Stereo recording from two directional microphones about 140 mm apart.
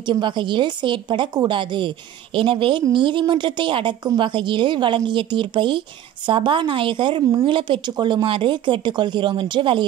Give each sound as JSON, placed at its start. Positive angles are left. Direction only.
{"t": 0.1, "sound": "a woman's voice", "side_deg": -35}